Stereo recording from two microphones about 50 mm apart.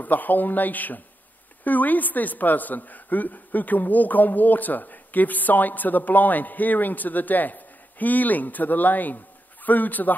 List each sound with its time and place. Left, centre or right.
0.0 s a woman's voice: left